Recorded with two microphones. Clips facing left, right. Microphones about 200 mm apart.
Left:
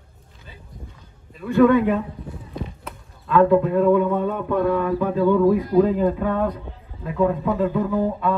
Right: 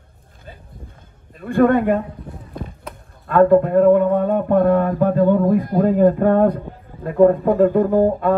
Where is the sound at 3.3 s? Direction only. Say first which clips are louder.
Right 3 dB; 50° right (ahead or behind).